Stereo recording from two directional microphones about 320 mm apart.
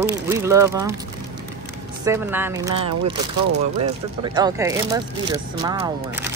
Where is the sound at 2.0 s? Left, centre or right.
Centre.